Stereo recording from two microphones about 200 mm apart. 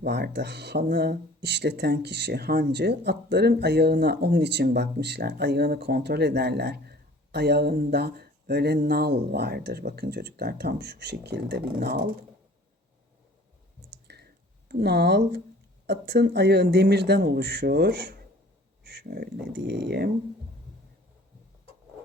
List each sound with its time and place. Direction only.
0.0 s speech: 55° right (ahead or behind)
14.1 s a sound: 55° right (ahead or behind)
15.9 s speech: 55° right (ahead or behind)